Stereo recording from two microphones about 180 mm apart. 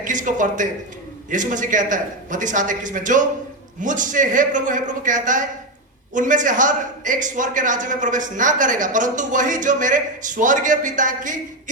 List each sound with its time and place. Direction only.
0.0 s a man's voice: 45° right (ahead or behind)